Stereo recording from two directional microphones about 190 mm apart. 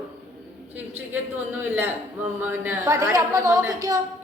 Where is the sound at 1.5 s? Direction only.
10° right (ahead or behind).